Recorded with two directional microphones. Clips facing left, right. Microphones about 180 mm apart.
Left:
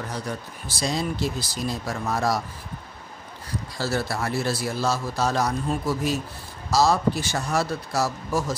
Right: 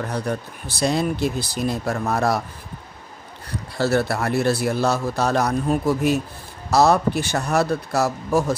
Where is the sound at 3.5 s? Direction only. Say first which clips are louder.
Right 6 dB; 60° right (ahead or behind).